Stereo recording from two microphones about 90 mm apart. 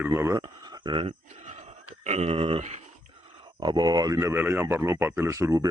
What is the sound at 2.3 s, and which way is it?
Speech, 90° right.